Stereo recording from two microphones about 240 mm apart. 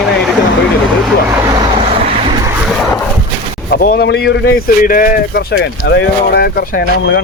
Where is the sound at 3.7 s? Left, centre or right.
Left.